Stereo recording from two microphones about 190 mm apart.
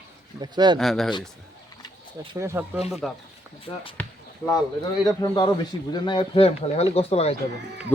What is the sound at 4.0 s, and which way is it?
Basketball bounce, 15° left (ahead or behind).